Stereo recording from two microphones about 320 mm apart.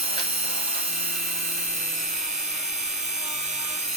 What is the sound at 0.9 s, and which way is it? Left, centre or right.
Tools, right.